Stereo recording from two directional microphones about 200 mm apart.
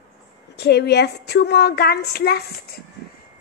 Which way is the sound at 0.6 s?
55° left (ahead or behind).